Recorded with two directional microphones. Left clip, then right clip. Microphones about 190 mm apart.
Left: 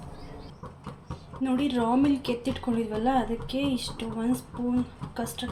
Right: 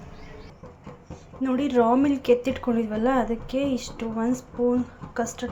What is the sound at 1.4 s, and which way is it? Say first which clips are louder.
Speech: right 6 dB; 15° right (ahead or behind).